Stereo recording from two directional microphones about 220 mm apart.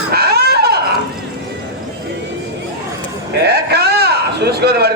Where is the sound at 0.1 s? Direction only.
45° right (ahead or behind).